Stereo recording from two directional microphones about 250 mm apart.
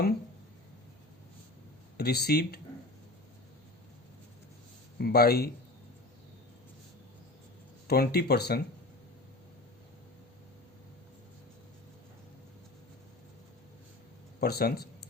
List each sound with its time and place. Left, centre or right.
2.0 s speech: left
4.9 s speech: left
7.9 s speech: left
14.4 s speech: left